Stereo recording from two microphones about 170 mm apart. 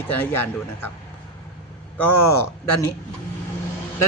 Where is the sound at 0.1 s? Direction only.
10° left (ahead or behind).